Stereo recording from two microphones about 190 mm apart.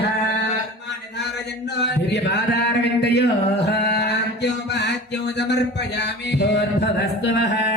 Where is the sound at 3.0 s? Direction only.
60° left (ahead or behind).